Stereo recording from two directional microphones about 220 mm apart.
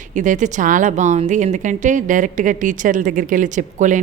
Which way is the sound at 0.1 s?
35° right (ahead or behind).